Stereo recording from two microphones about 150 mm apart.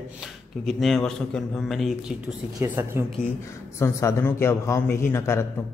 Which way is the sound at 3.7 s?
20° left (ahead or behind).